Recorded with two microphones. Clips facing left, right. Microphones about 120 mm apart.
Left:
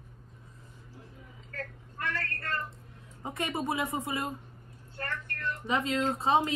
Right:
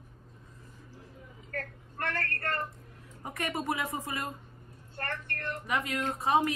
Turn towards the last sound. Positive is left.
turn(degrees=25)  # may be behind; listen again after turning